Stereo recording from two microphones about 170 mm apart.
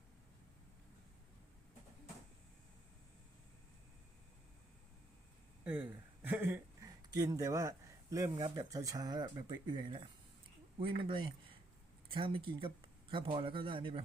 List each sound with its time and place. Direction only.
5.6 s speech: 10° right (ahead or behind); by 14.0 s 30° right (ahead or behind)